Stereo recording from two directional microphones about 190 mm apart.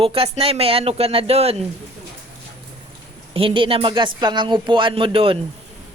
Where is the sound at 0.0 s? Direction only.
30° right (ahead or behind).